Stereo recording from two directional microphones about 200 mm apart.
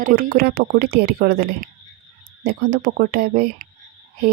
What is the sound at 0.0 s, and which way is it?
Speech, 45° right (ahead or behind).